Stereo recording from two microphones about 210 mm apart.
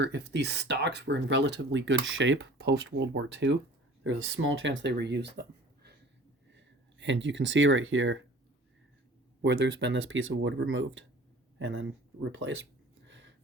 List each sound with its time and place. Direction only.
0.0 s speech: 55° right (ahead or behind)
9.4 s speech: 60° right (ahead or behind)
13.1 s a sound: 60° right (ahead or behind)